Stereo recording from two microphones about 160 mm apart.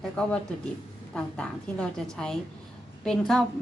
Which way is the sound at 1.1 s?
5° left (ahead or behind).